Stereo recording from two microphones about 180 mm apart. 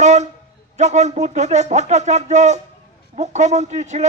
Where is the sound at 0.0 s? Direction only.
40° right (ahead or behind).